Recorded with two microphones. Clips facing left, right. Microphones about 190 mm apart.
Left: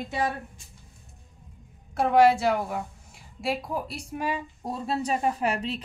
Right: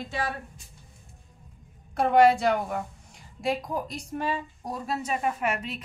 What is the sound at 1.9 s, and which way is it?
Speech, centre (ahead or behind).